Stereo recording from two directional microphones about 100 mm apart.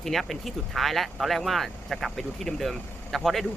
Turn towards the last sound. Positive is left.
turn(degrees=0)  # may be behind; listen again after turning